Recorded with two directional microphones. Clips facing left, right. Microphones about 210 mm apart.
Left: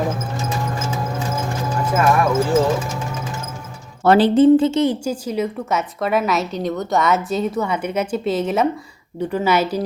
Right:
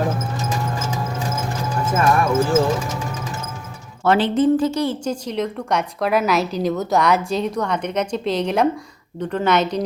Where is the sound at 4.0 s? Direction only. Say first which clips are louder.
Left 4 dB; 35° left (ahead or behind); by 5.0 s 20° left (ahead or behind).